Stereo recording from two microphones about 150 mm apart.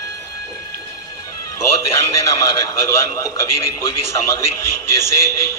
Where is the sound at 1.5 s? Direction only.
20° left (ahead or behind).